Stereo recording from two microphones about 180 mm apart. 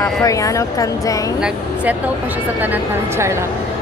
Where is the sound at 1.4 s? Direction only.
10° right (ahead or behind).